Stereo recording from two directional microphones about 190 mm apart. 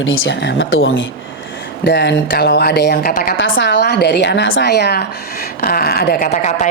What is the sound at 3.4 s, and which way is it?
A woman's voice, 75° left (ahead or behind).